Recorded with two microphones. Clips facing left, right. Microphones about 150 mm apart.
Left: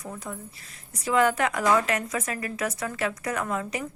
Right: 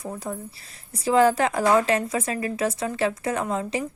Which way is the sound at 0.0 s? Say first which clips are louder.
Right 5 dB; 35° right (ahead or behind).